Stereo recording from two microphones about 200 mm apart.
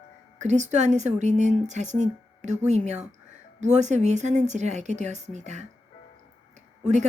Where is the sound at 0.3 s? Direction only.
35° right (ahead or behind).